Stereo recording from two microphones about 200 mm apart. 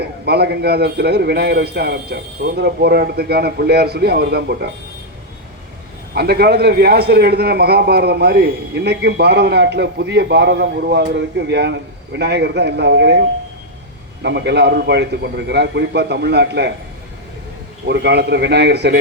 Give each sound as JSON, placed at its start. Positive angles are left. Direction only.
{"t": 0.0, "sound": "a man's voice", "side_deg": -55}
{"t": 6.1, "sound": "a man's voice", "side_deg": -50}
{"t": 17.8, "sound": "a man's voice", "side_deg": -60}